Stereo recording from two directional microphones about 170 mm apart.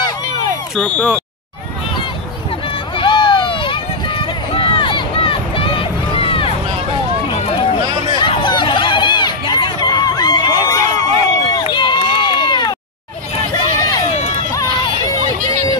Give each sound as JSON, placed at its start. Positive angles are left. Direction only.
{"t": 0.7, "sound": "speech", "side_deg": 10}
{"t": 3.0, "sound": "run", "side_deg": 30}
{"t": 14.1, "sound": "run", "side_deg": 40}
{"t": 14.5, "sound": "run", "side_deg": 20}